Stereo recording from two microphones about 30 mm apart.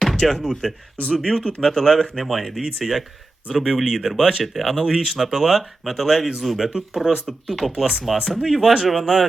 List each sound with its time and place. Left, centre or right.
0.2 s speech: centre
2.1 s speech: centre